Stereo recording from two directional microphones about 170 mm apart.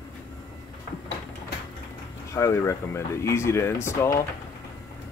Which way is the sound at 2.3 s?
15° left (ahead or behind).